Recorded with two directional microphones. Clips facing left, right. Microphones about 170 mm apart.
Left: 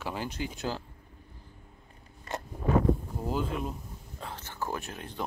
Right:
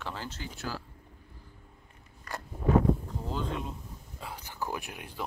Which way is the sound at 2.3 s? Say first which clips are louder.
Left 3 dB; 25° left (ahead or behind).